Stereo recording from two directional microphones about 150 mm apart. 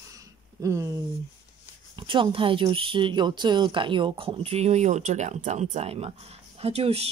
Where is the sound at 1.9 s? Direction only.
35° right (ahead or behind).